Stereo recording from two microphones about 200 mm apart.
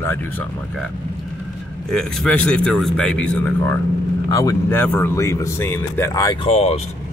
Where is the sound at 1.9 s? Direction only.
5° left (ahead or behind); by 6.3 s 20° left (ahead or behind).